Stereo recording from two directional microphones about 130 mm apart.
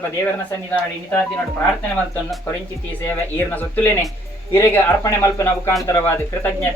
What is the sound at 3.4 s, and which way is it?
Speech, 15° left (ahead or behind).